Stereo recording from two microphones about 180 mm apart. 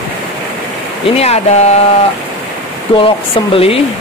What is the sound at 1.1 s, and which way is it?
Speech, 35° left (ahead or behind).